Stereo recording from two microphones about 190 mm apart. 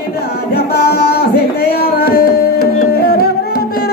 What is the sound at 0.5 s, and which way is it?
Music, 55° left (ahead or behind).